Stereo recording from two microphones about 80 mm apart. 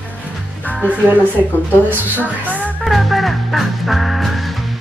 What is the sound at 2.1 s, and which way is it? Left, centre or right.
Music, centre.